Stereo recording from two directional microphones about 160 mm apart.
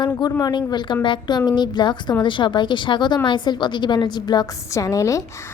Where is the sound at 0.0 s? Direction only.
25° left (ahead or behind).